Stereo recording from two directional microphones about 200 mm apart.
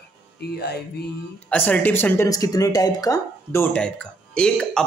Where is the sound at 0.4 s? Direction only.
55° left (ahead or behind).